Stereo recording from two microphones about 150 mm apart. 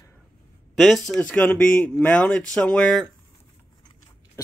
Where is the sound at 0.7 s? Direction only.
Centre (ahead or behind).